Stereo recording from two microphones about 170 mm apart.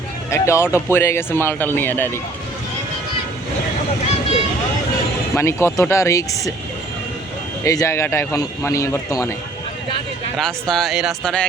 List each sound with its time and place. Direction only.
0.3 s speech: 15° left (ahead or behind)
5.3 s speech: 15° left (ahead or behind)
7.6 s speech: 20° left (ahead or behind)
10.3 s speech: centre (ahead or behind)